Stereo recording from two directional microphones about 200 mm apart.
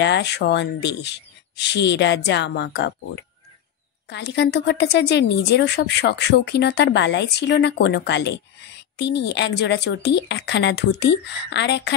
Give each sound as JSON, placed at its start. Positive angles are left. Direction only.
{"t": 0.0, "sound": "a woman's voice", "side_deg": 60}
{"t": 4.1, "sound": "a woman's voice", "side_deg": 55}